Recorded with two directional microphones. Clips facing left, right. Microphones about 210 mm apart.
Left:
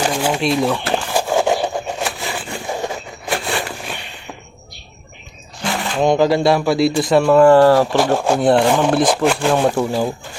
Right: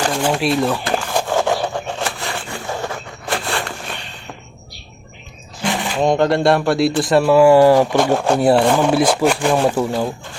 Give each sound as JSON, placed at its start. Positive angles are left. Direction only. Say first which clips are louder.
{"t": 0.0, "sound": "speech", "louder": "even", "side_deg": 5}
{"t": 0.9, "sound": "a sound", "louder": "left 1 dB", "side_deg": 5}
{"t": 1.3, "sound": "wood", "louder": "left 2 dB", "side_deg": 15}
{"t": 2.5, "sound": "train", "louder": "left 3 dB", "side_deg": 15}
{"t": 3.2, "sound": "a sound", "louder": "left 1 dB", "side_deg": 0}
{"t": 5.6, "sound": "speech", "louder": "even", "side_deg": 0}
{"t": 7.9, "sound": "speech", "louder": "even", "side_deg": 0}
{"t": 8.4, "sound": "speech", "louder": "even", "side_deg": -5}